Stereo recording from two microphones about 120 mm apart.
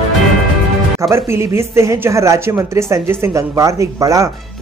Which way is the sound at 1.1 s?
20° right (ahead or behind).